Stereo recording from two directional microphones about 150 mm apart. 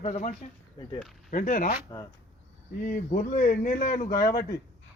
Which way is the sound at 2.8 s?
65° left (ahead or behind).